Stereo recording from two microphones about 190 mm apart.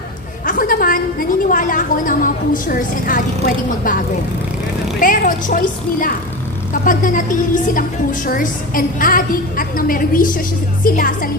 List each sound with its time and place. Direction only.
0.4 s a woman's voice: 50° left (ahead or behind)